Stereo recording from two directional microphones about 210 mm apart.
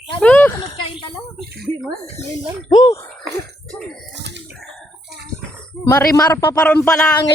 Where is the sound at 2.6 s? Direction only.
25° left (ahead or behind).